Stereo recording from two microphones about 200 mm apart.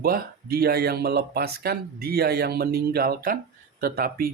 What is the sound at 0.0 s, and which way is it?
Speech, 45° right (ahead or behind).